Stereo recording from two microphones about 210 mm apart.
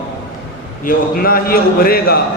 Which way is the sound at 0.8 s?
45° left (ahead or behind).